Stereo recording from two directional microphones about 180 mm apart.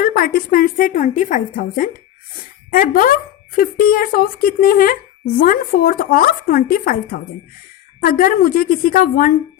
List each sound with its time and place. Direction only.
0.0 s a woman's voice: 55° left (ahead or behind)